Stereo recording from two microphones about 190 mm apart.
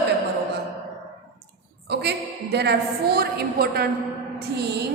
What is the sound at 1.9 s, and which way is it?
A woman's voice, 60° right (ahead or behind).